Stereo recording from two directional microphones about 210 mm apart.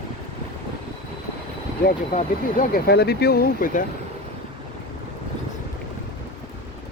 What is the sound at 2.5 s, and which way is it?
Speech, 45° left (ahead or behind).